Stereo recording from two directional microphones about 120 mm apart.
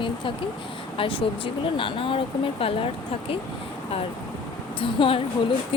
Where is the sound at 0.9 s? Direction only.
45° left (ahead or behind).